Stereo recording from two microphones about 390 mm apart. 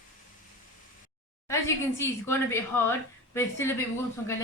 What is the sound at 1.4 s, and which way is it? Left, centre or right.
Speech, centre.